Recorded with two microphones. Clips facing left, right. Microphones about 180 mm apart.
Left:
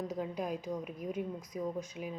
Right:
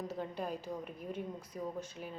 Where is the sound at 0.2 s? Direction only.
5° left (ahead or behind).